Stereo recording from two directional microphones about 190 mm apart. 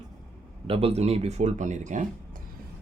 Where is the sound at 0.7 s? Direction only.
30° right (ahead or behind).